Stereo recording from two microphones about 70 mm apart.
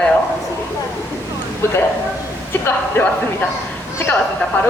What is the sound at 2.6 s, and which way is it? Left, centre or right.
Speech, left.